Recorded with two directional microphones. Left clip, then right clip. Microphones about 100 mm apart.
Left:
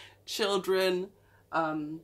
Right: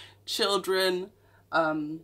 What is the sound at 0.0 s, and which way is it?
Speech, 30° right (ahead or behind).